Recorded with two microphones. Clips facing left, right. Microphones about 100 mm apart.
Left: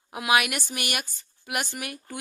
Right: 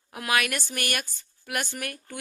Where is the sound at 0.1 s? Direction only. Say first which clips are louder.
Left 3 dB; 15° left (ahead or behind).